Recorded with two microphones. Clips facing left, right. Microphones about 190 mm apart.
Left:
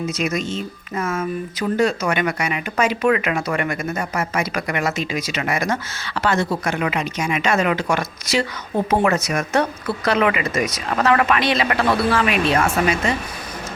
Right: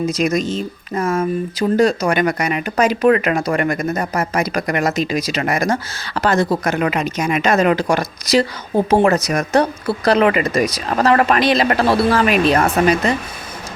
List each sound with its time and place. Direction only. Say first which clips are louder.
0.0 s speech: right 5 dB; 35° right (ahead or behind)